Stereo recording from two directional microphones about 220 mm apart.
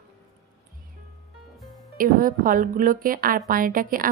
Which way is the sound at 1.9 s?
40° right (ahead or behind).